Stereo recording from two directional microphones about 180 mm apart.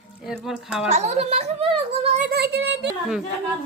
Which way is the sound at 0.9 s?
40° right (ahead or behind).